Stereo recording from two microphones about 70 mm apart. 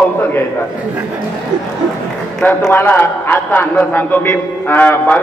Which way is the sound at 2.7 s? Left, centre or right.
Left.